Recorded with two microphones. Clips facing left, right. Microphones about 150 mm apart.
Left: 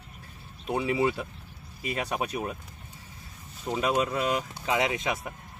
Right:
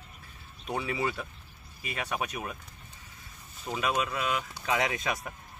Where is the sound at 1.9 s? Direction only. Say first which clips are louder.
Left 3 dB; 35° left (ahead or behind).